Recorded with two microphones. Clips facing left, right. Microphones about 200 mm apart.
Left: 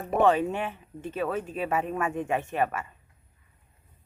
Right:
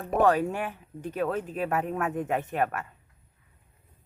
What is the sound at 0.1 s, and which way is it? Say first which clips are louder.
Speech: even; centre (ahead or behind).